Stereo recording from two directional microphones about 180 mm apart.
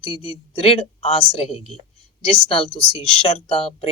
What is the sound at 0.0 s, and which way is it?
Speech, 30° left (ahead or behind).